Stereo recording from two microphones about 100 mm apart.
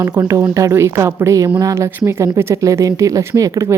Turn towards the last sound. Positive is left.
turn(degrees=-30)  # may be behind; listen again after turning